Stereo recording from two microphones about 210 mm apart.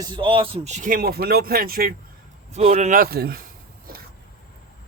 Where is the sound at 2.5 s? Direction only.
30° right (ahead or behind); by 3.4 s 45° right (ahead or behind).